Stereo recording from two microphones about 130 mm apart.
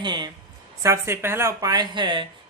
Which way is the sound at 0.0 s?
35° right (ahead or behind).